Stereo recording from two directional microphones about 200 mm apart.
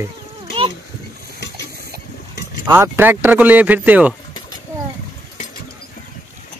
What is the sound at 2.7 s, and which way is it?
Speech, 10° right (ahead or behind).